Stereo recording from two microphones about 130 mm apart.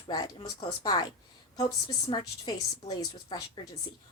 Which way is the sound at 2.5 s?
35° left (ahead or behind).